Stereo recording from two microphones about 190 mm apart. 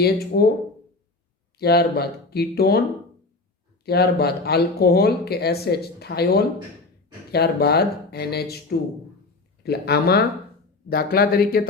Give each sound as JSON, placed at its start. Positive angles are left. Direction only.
{"t": 0.0, "sound": "speech", "side_deg": 55}
{"t": 1.5, "sound": "speech", "side_deg": 55}
{"t": 3.8, "sound": "speech", "side_deg": 55}
{"t": 9.6, "sound": "speech", "side_deg": 55}